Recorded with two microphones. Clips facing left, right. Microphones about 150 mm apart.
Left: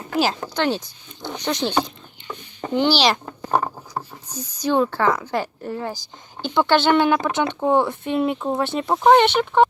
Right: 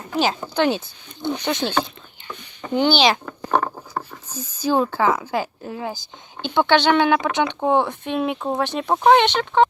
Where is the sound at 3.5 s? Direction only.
5° left (ahead or behind).